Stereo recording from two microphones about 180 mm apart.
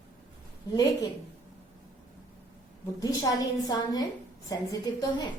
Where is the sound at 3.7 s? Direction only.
20° left (ahead or behind).